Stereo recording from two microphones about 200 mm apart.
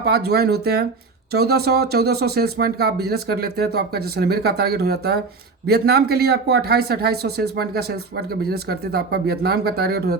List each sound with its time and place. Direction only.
0.0 s speech: 55° right (ahead or behind)